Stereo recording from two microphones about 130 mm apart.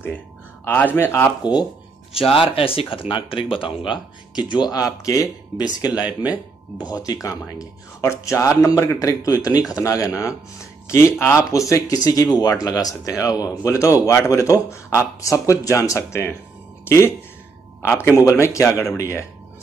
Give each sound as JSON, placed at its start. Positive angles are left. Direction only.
{"t": 0.7, "sound": "speech", "side_deg": 15}
{"t": 2.5, "sound": "speech", "side_deg": 45}
{"t": 5.9, "sound": "speech", "side_deg": -10}
{"t": 6.9, "sound": "speech", "side_deg": 25}
{"t": 18.2, "sound": "speech", "side_deg": 25}